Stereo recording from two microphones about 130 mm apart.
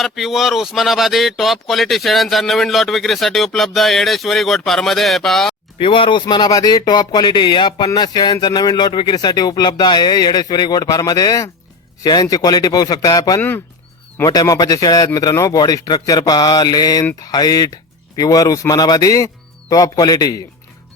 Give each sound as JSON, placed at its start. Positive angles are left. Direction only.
{"t": 0.0, "sound": "speech", "side_deg": 0}
{"t": 5.8, "sound": "speech", "side_deg": 40}